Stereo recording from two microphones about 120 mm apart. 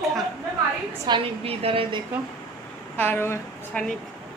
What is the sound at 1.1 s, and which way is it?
Speech, 55° right (ahead or behind).